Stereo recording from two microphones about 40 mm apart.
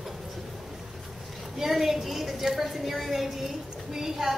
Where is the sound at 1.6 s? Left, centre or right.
Centre.